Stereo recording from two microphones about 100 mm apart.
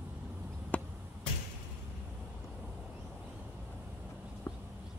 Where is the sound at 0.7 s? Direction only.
15° left (ahead or behind).